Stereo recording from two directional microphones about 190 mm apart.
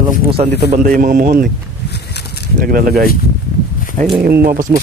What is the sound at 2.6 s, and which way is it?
Speech, 50° right (ahead or behind).